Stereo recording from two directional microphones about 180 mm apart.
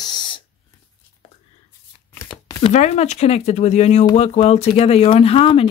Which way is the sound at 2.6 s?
35° left (ahead or behind).